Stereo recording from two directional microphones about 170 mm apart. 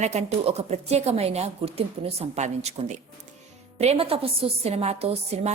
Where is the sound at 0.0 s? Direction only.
40° right (ahead or behind).